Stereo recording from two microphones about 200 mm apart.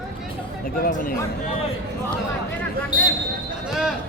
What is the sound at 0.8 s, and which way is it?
Speech, 45° left (ahead or behind).